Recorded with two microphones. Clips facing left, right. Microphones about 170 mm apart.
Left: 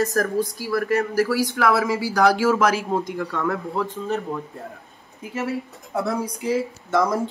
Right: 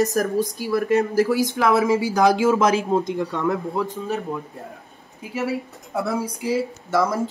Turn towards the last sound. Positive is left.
turn(degrees=0)  # may be behind; listen again after turning